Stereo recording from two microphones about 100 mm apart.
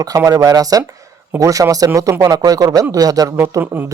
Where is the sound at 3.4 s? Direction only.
25° right (ahead or behind).